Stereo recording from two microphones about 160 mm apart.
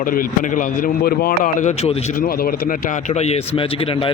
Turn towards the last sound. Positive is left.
turn(degrees=35)  # may be behind; listen again after turning